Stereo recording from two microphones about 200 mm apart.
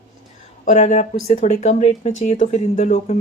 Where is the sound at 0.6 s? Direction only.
35° left (ahead or behind).